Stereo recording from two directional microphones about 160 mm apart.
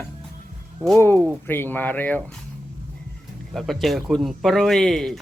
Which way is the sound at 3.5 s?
Centre (ahead or behind).